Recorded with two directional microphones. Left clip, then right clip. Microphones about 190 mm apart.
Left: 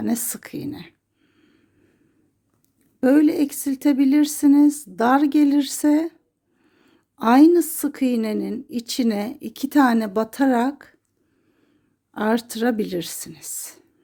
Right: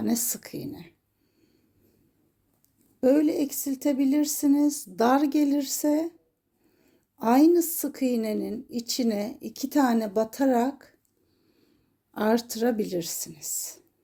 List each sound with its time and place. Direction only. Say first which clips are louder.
0.0 s a woman's voice: left 3 dB; 25° left (ahead or behind)
3.0 s a woman's voice: left 5 dB; 35° left (ahead or behind)
12.1 s a woman's voice: left 3 dB; 20° left (ahead or behind)